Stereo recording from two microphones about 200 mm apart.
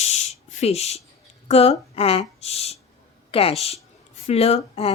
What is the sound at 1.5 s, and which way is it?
A woman's voice, 30° left (ahead or behind).